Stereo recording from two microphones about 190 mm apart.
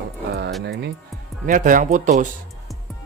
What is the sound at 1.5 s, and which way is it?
Speech, 45° right (ahead or behind).